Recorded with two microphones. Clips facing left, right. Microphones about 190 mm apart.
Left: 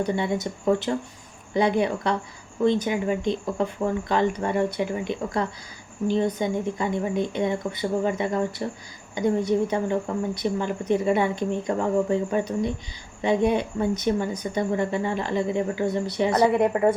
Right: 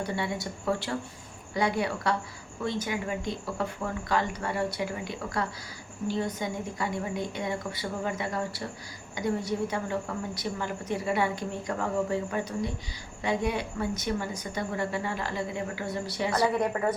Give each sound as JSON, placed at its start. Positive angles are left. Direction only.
{"t": 0.0, "sound": "speech", "side_deg": 20}